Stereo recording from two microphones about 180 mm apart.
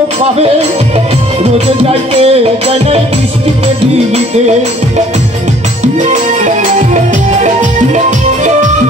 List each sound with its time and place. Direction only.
1.4 s music: 35° right (ahead or behind)
3.6 s music: 40° right (ahead or behind)
6.1 s music: 45° right (ahead or behind)